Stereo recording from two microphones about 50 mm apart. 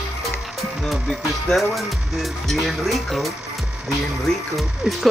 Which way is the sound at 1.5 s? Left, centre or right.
Centre.